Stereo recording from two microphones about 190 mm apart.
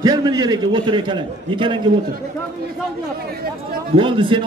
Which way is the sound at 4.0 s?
25° right (ahead or behind).